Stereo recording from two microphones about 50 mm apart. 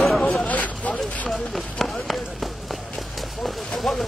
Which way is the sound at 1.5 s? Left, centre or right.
Centre.